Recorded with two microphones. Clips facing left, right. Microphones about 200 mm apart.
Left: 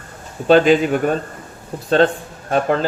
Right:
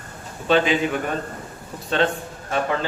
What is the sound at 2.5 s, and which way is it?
Speech, 45° left (ahead or behind).